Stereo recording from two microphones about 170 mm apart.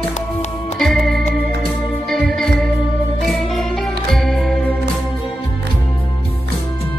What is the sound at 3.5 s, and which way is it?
Music, centre (ahead or behind).